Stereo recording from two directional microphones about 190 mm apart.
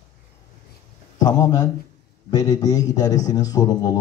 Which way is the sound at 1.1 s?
20° left (ahead or behind).